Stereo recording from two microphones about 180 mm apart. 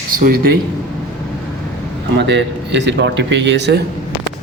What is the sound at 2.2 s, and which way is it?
Speech, 80° right.